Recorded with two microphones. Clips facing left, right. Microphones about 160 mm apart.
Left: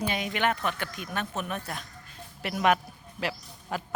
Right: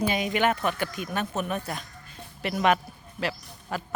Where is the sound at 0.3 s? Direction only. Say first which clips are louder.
Right 3 dB; 5° right (ahead or behind).